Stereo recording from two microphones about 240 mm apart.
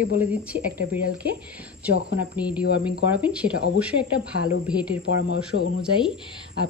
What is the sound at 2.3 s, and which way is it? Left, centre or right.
Speech, centre.